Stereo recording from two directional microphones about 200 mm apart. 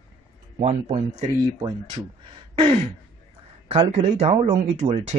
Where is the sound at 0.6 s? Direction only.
35° right (ahead or behind).